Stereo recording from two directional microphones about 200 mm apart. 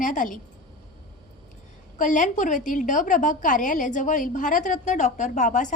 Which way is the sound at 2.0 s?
40° left (ahead or behind).